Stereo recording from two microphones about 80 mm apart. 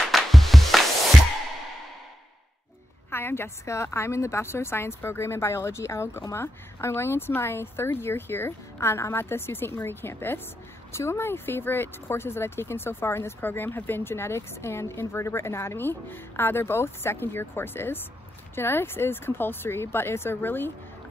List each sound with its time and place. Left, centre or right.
0.1 s music: centre
3.1 s speech: left